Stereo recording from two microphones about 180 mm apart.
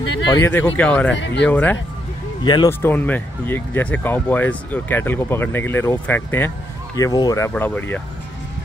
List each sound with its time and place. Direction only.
0.3 s speech: 10° left (ahead or behind)
1.1 s speech: 80° left
1.4 s speech: 5° left (ahead or behind)
2.4 s speech: 25° left (ahead or behind)
2.8 s speech: 10° left (ahead or behind)